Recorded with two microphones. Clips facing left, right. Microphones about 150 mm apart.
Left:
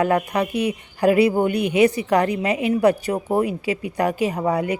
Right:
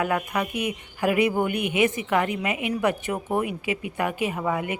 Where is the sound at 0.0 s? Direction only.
35° left (ahead or behind).